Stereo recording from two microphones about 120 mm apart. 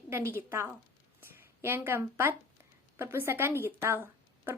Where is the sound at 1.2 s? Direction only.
20° right (ahead or behind).